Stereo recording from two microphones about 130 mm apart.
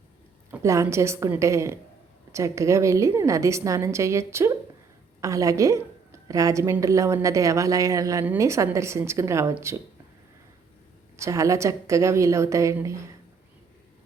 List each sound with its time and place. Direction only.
0.6 s a woman's voice: 25° right (ahead or behind)
11.2 s a woman's voice: 25° right (ahead or behind)